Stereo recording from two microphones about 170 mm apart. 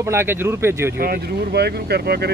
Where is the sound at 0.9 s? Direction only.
60° right (ahead or behind).